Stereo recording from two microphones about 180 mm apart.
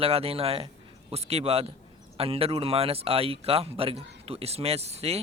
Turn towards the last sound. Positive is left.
turn(degrees=-35)  # may be behind; listen again after turning